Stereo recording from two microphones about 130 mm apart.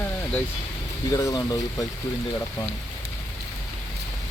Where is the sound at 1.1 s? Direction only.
25° left (ahead or behind).